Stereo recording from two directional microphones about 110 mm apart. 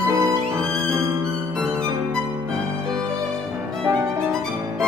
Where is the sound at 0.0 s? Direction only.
30° right (ahead or behind).